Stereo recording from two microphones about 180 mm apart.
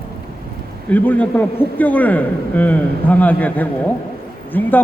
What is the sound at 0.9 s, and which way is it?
A man's voice, 10° left (ahead or behind).